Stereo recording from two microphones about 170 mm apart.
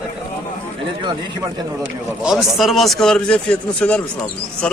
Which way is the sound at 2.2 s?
Centre (ahead or behind).